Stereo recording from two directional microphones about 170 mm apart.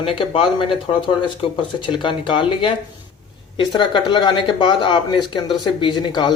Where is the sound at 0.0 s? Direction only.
30° left (ahead or behind).